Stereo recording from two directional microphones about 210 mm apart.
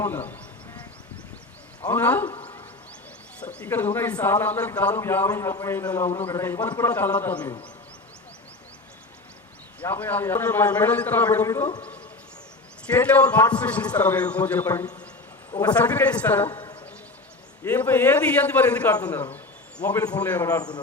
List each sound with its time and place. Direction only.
0.0 s a man's voice: 10° left (ahead or behind)
1.8 s a man's voice: 10° left (ahead or behind)
2.2 s a man's voice: 25° left (ahead or behind)
3.4 s a man's voice: 5° left (ahead or behind)
9.8 s a man's voice: 10° left (ahead or behind)
12.9 s a man's voice: 5° left (ahead or behind)
17.6 s a man's voice: 10° left (ahead or behind)